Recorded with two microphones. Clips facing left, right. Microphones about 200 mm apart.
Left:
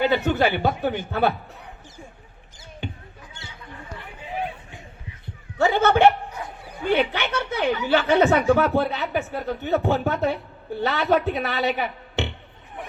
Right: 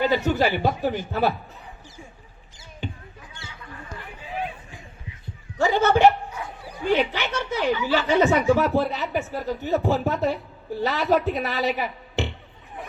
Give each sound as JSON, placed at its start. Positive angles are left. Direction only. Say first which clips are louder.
{"t": 0.3, "sound": "speech", "louder": "left 1 dB", "side_deg": -5}
{"t": 5.5, "sound": "speech", "louder": "left 1 dB", "side_deg": 60}
{"t": 8.5, "sound": "speech", "louder": "left 1 dB", "side_deg": 0}